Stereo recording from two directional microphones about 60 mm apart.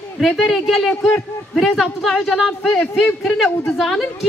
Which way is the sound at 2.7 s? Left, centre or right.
Centre.